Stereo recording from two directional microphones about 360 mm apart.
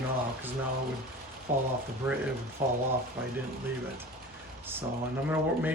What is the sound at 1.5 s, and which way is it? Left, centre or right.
Speech, right.